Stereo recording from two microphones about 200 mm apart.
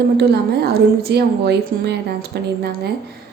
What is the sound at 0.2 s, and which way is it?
A woman's voice, 50° right (ahead or behind).